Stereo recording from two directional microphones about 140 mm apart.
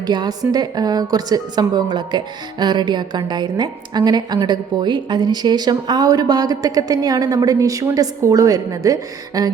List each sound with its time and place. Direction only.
0.0 s a woman's voice: 30° right (ahead or behind)